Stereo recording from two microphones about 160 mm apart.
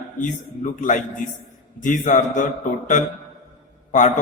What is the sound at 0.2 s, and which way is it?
A man's voice, 50° left (ahead or behind).